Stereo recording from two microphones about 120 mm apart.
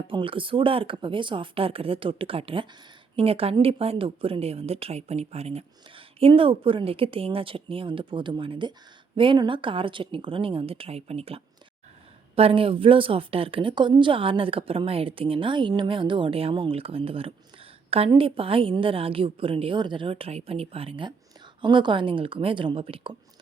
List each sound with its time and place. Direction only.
0.1 s a woman's voice: 45° right (ahead or behind)